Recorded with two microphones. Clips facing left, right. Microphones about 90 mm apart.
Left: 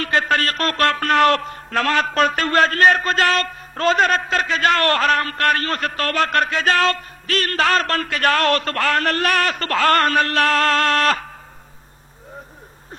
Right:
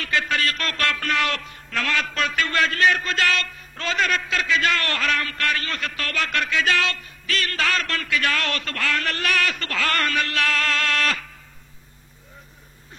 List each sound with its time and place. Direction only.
0.0 s a man's voice: 45° left (ahead or behind)